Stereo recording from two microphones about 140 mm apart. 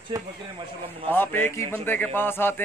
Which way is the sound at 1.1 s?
15° left (ahead or behind).